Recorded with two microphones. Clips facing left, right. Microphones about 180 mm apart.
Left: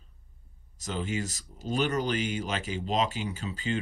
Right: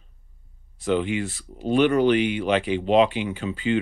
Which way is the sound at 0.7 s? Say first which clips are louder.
Right 9 dB; 40° left (ahead or behind).